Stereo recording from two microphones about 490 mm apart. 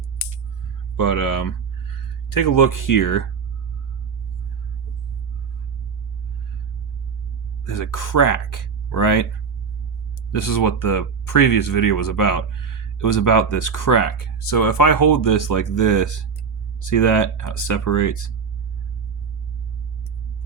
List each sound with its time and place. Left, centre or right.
0.9 s speech: left
7.6 s speech: left
10.3 s speech: left